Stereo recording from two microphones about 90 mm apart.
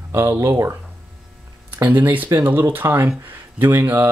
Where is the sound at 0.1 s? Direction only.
25° right (ahead or behind).